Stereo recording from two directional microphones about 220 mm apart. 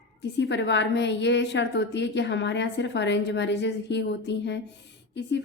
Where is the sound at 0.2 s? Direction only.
50° left (ahead or behind).